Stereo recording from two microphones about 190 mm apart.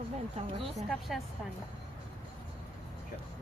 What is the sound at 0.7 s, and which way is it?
Speech, centre (ahead or behind).